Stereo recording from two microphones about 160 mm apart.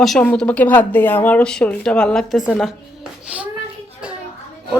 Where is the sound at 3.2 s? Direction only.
10° right (ahead or behind).